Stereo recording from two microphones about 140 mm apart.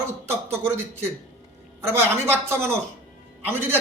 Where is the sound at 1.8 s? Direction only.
15° right (ahead or behind).